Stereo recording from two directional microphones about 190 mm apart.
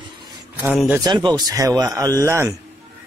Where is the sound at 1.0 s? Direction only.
20° right (ahead or behind).